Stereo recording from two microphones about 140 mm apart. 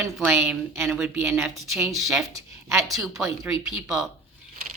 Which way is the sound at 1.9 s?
Centre (ahead or behind).